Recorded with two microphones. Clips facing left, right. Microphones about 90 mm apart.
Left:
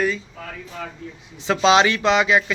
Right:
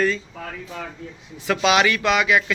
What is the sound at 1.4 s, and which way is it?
Speech, 25° left (ahead or behind).